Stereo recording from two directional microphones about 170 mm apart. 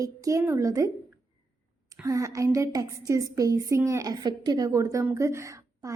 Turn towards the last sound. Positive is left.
turn(degrees=-20)  # may be behind; listen again after turning